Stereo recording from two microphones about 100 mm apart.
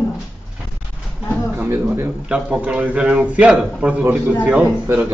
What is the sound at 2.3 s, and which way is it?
A man's voice, 10° right (ahead or behind).